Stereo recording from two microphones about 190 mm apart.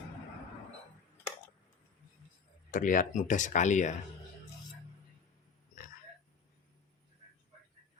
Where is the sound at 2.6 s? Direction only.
45° left (ahead or behind).